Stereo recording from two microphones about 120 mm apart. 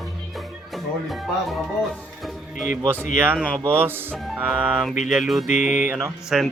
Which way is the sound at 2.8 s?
15° right (ahead or behind).